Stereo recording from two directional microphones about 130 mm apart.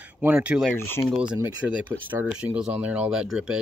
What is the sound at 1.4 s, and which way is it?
Speech, 15° right (ahead or behind).